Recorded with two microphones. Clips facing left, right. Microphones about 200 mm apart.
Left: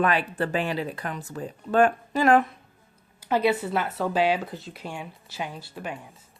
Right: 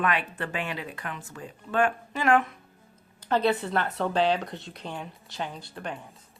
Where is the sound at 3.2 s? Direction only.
10° left (ahead or behind).